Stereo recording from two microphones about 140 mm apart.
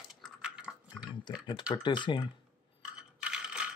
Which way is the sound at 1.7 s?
30° left (ahead or behind).